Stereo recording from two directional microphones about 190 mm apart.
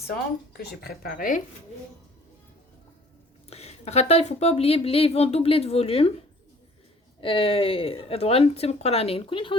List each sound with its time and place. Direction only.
0.5 s speech: 55° left (ahead or behind)
3.5 s a woman's voice: 35° left (ahead or behind)
7.2 s speech: 30° left (ahead or behind)